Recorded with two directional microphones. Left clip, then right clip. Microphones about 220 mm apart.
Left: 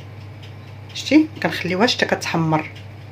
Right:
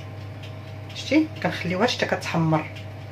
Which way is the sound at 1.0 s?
50° left (ahead or behind).